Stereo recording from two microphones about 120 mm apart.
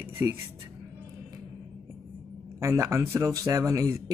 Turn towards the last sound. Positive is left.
turn(degrees=-25)  # may be behind; listen again after turning